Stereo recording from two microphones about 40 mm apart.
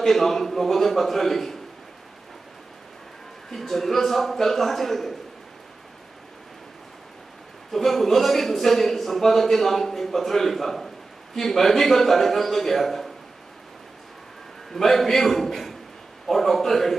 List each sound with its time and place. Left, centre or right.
0.0 s speech: centre
3.5 s speech: centre
7.7 s speech: centre
14.7 s speech: centre